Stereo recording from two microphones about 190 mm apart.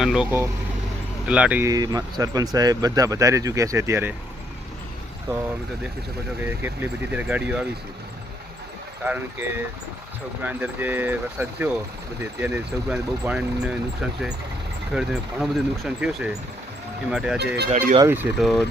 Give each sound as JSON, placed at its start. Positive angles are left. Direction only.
{"t": 0.0, "sound": "speech", "side_deg": -5}
{"t": 6.4, "sound": "speech", "side_deg": -10}
{"t": 9.0, "sound": "speech", "side_deg": -10}
{"t": 17.7, "sound": "speech", "side_deg": -45}
{"t": 18.1, "sound": "speech", "side_deg": -5}